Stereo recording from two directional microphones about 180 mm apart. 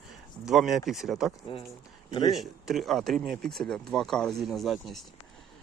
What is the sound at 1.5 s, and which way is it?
Speech, 30° left (ahead or behind).